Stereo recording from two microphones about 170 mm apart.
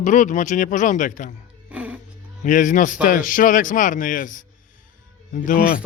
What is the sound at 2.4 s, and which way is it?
Speech, 50° left (ahead or behind).